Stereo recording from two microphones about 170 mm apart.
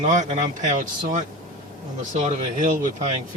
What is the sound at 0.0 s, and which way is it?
Speech, 45° right (ahead or behind).